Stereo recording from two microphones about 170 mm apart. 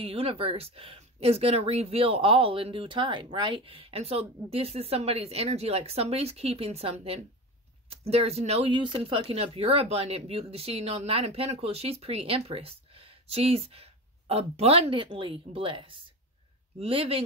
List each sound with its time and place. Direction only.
0.0 s speech: 35° right (ahead or behind)